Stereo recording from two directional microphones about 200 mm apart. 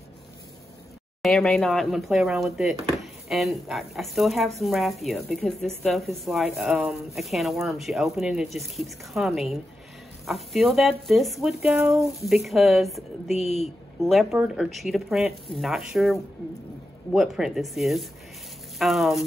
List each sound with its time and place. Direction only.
1.2 s speech: centre (ahead or behind)
12.1 s speech: centre (ahead or behind)
13.3 s speech: 35° left (ahead or behind)
14.0 s speech: centre (ahead or behind)